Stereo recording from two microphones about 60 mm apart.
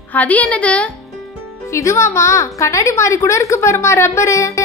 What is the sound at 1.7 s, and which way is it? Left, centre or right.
A woman's voice, left.